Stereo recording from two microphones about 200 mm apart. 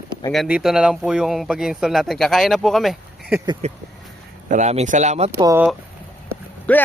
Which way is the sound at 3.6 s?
35° right (ahead or behind).